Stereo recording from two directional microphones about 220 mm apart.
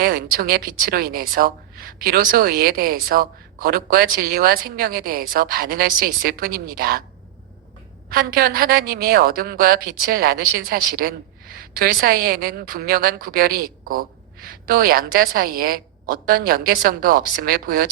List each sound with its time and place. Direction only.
0.0 s speech: 40° right (ahead or behind)
8.1 s a woman's voice: 40° right (ahead or behind)